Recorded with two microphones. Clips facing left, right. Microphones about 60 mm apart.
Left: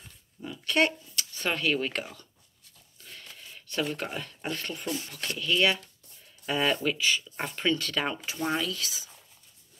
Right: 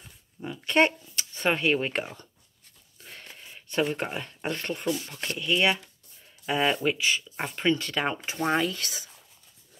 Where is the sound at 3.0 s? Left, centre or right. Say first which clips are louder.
Right 2 dB; right.